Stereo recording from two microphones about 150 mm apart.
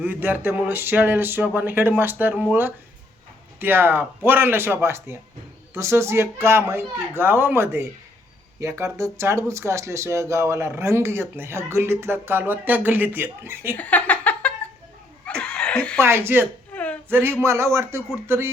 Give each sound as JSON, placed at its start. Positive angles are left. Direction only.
{"t": 0.0, "sound": "speech", "side_deg": -15}
{"t": 13.7, "sound": "a sound", "side_deg": 10}
{"t": 15.3, "sound": "laughter", "side_deg": 5}
{"t": 16.0, "sound": "speech", "side_deg": -15}
{"t": 16.7, "sound": "a sound", "side_deg": 10}
{"t": 17.1, "sound": "speech", "side_deg": -15}